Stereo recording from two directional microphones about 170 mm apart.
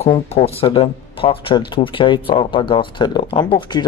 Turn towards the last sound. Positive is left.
turn(degrees=25)  # may be behind; listen again after turning